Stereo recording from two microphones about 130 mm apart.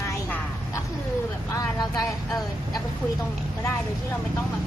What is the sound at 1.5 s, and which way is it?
Speech, 30° left (ahead or behind).